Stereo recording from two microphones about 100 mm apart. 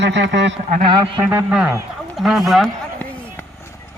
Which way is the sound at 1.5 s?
10° right (ahead or behind).